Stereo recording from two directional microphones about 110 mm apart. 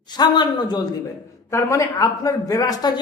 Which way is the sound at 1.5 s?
25° left (ahead or behind).